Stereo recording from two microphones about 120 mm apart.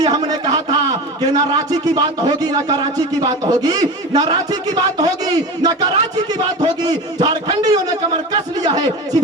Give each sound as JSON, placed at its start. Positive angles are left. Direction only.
{"t": 0.0, "sound": "a man's voice", "side_deg": -35}